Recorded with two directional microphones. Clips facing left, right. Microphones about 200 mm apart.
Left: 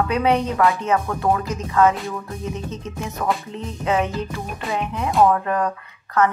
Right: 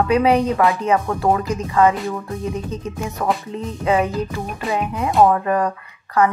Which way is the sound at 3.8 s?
5° right (ahead or behind).